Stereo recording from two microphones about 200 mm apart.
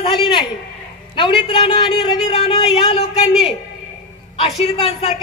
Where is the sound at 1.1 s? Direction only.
25° left (ahead or behind).